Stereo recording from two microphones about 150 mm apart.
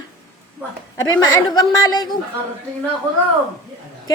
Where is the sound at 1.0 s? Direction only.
25° left (ahead or behind).